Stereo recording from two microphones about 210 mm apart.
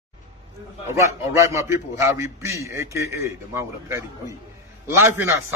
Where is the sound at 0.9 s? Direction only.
15° right (ahead or behind).